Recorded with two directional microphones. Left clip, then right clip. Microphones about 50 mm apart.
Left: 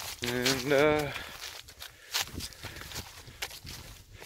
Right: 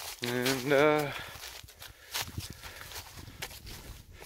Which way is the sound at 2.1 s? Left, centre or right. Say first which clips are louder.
Left 4 dB; right.